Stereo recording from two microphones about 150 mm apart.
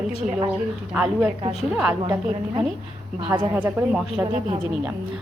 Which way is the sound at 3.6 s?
10° right (ahead or behind).